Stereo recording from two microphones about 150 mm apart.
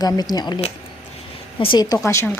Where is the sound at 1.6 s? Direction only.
30° left (ahead or behind).